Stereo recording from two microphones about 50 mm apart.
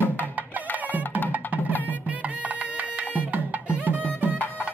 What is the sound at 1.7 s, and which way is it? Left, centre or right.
Music, left.